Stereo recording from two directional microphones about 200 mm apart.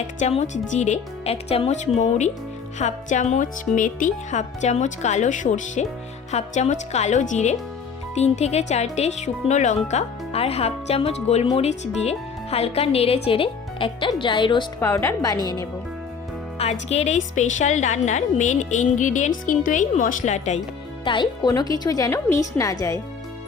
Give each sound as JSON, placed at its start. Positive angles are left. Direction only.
{"t": 0.2, "sound": "speech", "side_deg": 35}
{"t": 14.8, "sound": "speech", "side_deg": 15}
{"t": 16.9, "sound": "speech", "side_deg": 35}
{"t": 21.0, "sound": "speech", "side_deg": 25}